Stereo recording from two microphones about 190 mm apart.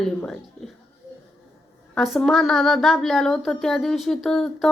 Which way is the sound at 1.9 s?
Centre (ahead or behind).